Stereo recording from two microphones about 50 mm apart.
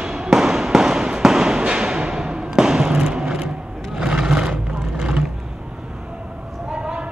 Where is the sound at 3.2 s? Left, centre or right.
Centre.